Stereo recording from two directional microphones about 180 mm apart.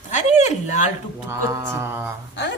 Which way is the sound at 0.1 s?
40° left (ahead or behind).